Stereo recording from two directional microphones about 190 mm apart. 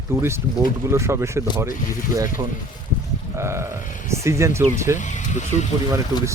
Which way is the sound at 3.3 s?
15° right (ahead or behind).